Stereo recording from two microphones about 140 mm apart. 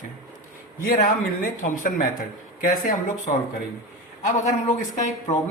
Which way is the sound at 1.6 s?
70° left (ahead or behind).